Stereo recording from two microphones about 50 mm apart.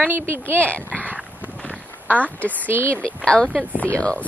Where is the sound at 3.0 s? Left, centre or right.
Left.